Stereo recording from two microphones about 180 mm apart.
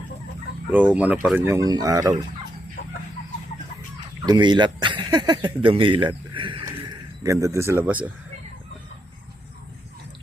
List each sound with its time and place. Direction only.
0.7 s speech: 10° right (ahead or behind)
4.3 s speech: 25° right (ahead or behind); by 8.1 s 10° right (ahead or behind)